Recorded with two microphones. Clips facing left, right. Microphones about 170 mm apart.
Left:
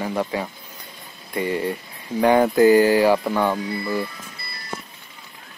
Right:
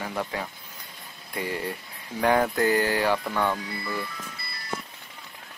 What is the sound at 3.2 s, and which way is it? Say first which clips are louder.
Speech: left 5 dB; 25° left (ahead or behind).